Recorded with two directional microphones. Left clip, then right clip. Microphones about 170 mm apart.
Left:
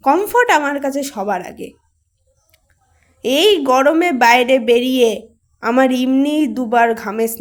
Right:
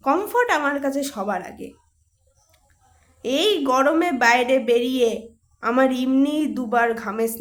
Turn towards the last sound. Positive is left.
turn(degrees=25)  # may be behind; listen again after turning